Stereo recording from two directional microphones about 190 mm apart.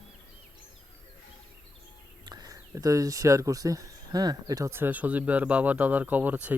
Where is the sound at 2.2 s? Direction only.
20° right (ahead or behind).